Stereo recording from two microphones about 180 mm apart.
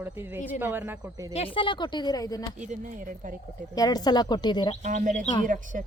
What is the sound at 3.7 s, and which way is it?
Speech, 20° left (ahead or behind).